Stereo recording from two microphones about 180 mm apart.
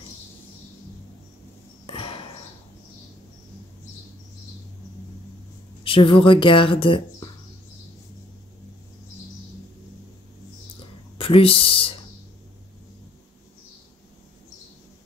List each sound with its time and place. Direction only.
1.9 s a sound: 30° left (ahead or behind)
5.9 s a woman's voice: 30° left (ahead or behind)
11.1 s speech: 30° left (ahead or behind)